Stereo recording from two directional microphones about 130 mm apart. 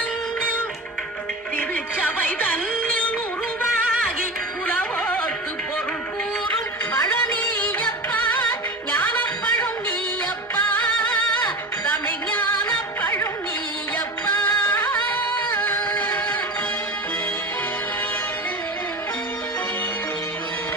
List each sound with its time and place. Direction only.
1.5 s music: 15° left (ahead or behind)
4.6 s music: 15° left (ahead or behind)
6.9 s music: 15° left (ahead or behind)
13.0 s music: 15° left (ahead or behind)
15.5 s music: 15° left (ahead or behind)